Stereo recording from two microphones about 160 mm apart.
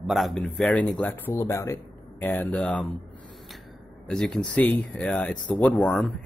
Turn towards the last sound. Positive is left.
turn(degrees=0)  # may be behind; listen again after turning